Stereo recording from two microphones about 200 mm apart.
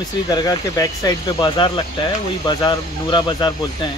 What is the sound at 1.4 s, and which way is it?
Speech, 25° left (ahead or behind).